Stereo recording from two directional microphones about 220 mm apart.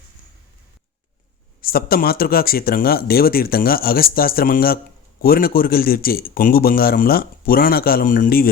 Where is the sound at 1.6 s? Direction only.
40° left (ahead or behind).